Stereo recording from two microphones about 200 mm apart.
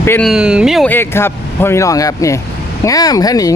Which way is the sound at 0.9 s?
10° left (ahead or behind).